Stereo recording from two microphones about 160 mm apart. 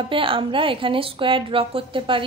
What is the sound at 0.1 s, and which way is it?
A woman's voice, 35° right (ahead or behind).